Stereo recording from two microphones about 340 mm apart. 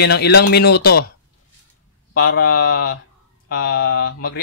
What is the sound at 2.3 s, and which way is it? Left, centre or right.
Speech, left.